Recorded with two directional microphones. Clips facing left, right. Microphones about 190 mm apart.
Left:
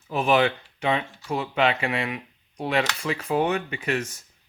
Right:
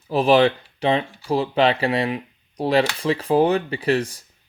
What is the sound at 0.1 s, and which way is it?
Speech, 35° right (ahead or behind).